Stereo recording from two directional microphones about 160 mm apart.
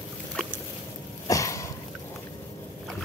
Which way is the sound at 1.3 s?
20° left (ahead or behind).